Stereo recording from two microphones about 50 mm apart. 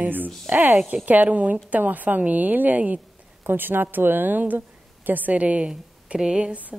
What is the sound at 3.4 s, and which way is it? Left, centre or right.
A woman's voice, right.